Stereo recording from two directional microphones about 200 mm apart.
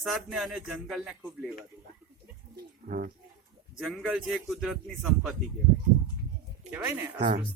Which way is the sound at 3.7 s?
Centre (ahead or behind).